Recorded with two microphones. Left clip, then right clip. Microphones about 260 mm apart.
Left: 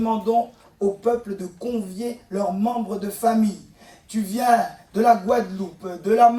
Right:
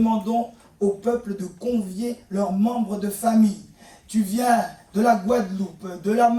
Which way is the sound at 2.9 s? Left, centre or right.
Left.